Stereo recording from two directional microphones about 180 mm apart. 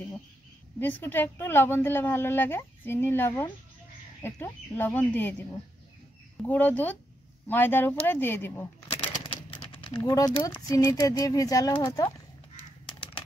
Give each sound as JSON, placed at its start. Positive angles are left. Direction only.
{"t": 0.7, "sound": "a woman's voice", "side_deg": 10}
{"t": 6.3, "sound": "a woman's voice", "side_deg": 10}
{"t": 8.8, "sound": "a sound", "side_deg": 30}
{"t": 10.0, "sound": "speech", "side_deg": 20}